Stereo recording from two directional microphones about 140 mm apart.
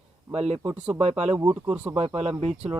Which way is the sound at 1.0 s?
50° right (ahead or behind).